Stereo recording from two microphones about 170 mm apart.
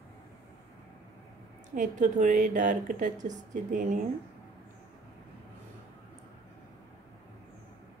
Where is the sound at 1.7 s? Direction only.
45° right (ahead or behind).